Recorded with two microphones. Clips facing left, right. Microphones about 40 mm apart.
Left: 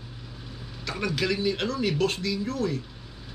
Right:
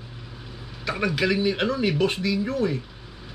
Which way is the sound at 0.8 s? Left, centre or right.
Centre.